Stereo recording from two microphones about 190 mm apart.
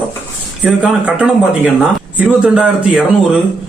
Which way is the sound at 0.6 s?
5° right (ahead or behind).